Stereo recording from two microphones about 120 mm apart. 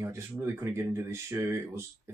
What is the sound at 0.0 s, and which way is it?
Speech, 25° right (ahead or behind).